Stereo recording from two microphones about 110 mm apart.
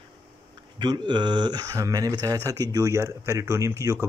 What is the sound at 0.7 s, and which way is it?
Speech, 40° right (ahead or behind).